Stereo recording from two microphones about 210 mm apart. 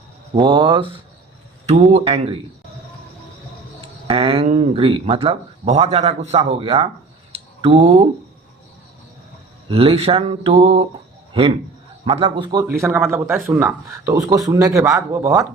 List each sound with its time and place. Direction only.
0.3 s speech: 20° right (ahead or behind)
4.0 s speech: 25° right (ahead or behind)
7.3 s a sound: 25° right (ahead or behind)
9.6 s speech: 25° right (ahead or behind)
12.0 s speech: 25° right (ahead or behind)
12.6 s speech: 10° right (ahead or behind)